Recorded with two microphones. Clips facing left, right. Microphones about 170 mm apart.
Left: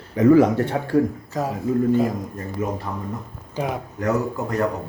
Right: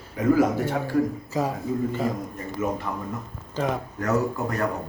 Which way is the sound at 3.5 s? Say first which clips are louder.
Even; 10° left (ahead or behind).